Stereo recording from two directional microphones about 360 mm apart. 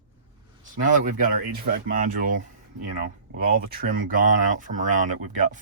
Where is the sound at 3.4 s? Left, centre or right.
Right.